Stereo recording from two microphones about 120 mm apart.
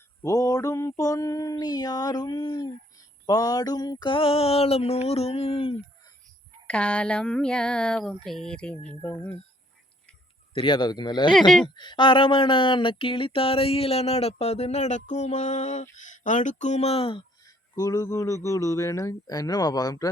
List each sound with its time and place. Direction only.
0.2 s speech: 25° left (ahead or behind)
3.2 s a sound: 30° left (ahead or behind); by 5.7 s 55° left (ahead or behind)
6.7 s speech: 10° left (ahead or behind)
10.5 s speech: 45° left (ahead or behind)
11.3 s speech: 5° left (ahead or behind)
11.6 s speech: 40° left (ahead or behind)
17.4 s speech: 30° left (ahead or behind)